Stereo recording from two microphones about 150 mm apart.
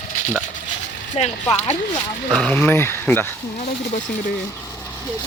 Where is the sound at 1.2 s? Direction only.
45° left (ahead or behind).